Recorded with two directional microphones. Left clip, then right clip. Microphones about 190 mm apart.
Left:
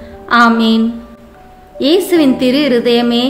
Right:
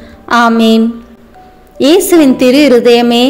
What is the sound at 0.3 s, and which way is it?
A woman's voice, 35° right (ahead or behind).